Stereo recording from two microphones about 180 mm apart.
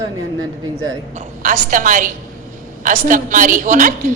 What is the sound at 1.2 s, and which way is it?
A woman's voice, 45° right (ahead or behind).